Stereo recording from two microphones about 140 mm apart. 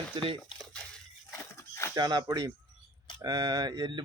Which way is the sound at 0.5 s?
5° left (ahead or behind).